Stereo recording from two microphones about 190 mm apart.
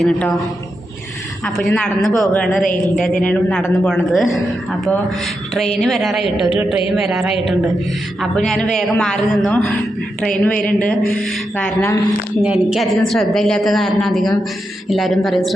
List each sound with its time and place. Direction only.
0.0 s a man's voice: 5° left (ahead or behind)
1.5 s a woman's voice: 5° left (ahead or behind)
5.5 s a woman's voice: centre (ahead or behind)
8.4 s a woman's voice: centre (ahead or behind)
12.4 s a woman's voice: 5° right (ahead or behind)